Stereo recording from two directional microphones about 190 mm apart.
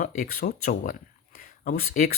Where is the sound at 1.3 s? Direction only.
45° left (ahead or behind).